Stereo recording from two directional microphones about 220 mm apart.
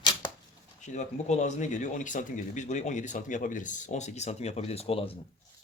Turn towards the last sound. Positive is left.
turn(degrees=25)  # may be behind; listen again after turning